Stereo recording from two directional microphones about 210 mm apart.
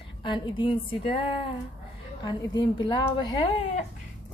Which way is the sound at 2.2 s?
20° left (ahead or behind).